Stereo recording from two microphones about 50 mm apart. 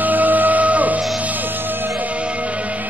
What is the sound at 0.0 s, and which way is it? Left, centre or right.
Music, right.